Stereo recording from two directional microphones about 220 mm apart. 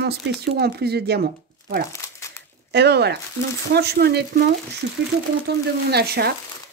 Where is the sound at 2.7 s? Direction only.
50° right (ahead or behind).